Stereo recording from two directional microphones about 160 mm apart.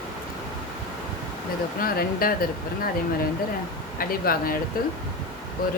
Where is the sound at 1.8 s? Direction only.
65° left (ahead or behind).